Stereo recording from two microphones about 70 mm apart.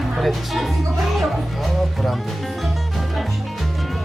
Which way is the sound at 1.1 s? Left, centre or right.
Centre.